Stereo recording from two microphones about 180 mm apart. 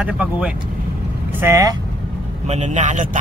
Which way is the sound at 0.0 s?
5° right (ahead or behind).